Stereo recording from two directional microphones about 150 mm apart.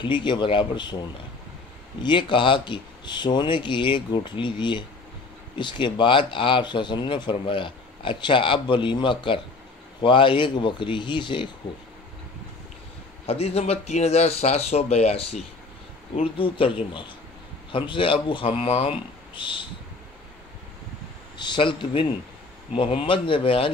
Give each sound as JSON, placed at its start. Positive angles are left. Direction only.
{"t": 0.0, "sound": "speech", "side_deg": 30}
{"t": 2.0, "sound": "speech", "side_deg": 30}
{"t": 13.3, "sound": "speech", "side_deg": 45}
{"t": 17.7, "sound": "speech", "side_deg": 35}
{"t": 21.4, "sound": "speech", "side_deg": 30}